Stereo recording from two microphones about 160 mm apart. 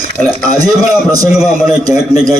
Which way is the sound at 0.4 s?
20° right (ahead or behind).